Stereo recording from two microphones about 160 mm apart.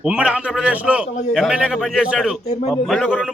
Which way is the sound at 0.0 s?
5° right (ahead or behind).